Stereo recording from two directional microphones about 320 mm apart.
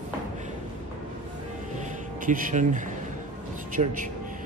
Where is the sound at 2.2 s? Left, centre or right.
Right.